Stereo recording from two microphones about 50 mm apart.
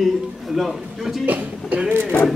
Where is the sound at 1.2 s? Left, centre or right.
Right.